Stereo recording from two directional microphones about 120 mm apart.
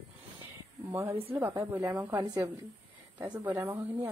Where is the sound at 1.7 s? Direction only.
20° right (ahead or behind).